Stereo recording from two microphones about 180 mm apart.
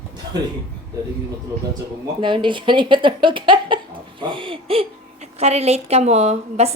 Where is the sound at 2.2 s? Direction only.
25° right (ahead or behind).